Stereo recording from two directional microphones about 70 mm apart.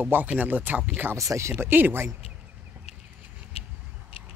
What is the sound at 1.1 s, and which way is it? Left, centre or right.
Speech, right.